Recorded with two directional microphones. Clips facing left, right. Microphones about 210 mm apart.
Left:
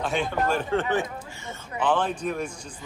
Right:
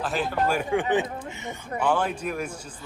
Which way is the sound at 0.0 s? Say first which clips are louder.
Even; centre (ahead or behind).